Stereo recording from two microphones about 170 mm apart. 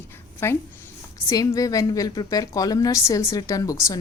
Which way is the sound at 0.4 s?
15° left (ahead or behind).